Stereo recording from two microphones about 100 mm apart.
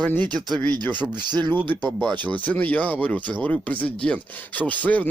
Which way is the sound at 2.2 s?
15° left (ahead or behind).